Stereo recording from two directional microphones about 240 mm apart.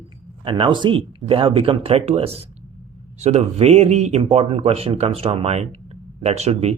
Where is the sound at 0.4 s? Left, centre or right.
Centre.